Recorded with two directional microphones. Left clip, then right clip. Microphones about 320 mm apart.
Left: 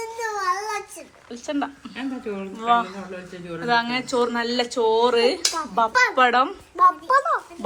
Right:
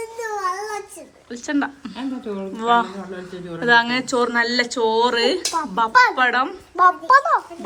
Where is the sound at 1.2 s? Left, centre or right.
Centre.